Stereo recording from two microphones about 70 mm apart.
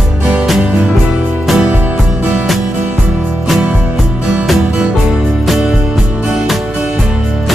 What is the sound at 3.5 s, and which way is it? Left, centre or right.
Music, centre.